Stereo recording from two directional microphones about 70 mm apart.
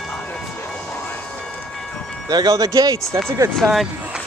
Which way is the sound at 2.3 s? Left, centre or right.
Right.